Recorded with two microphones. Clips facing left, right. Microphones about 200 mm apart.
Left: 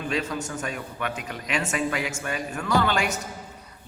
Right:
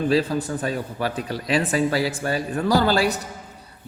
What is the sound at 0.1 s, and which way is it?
A man's voice, 35° right (ahead or behind).